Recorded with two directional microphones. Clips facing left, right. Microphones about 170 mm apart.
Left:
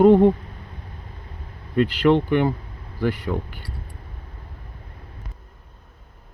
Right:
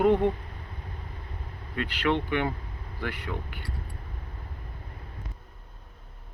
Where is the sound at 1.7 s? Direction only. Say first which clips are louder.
Left 10 dB; 35° left (ahead or behind).